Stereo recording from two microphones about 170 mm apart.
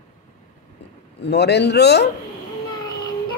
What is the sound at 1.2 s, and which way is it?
Speech, 80° left.